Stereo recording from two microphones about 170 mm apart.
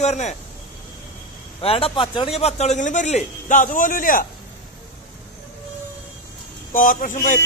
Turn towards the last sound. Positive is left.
turn(degrees=50)  # may be behind; listen again after turning